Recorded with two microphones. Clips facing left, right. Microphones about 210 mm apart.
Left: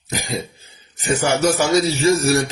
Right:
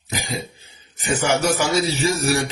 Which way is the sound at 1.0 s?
40° left (ahead or behind).